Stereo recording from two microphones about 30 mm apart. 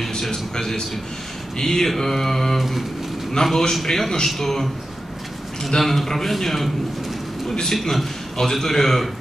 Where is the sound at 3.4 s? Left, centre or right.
Left.